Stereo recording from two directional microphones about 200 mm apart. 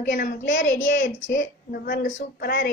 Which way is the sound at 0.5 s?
70° left (ahead or behind).